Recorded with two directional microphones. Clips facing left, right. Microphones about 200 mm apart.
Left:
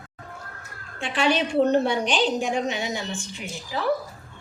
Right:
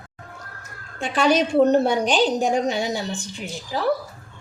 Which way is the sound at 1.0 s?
40° right (ahead or behind).